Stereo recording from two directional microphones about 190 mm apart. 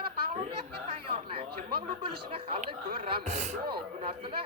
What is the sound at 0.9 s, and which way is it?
Speech, 30° right (ahead or behind).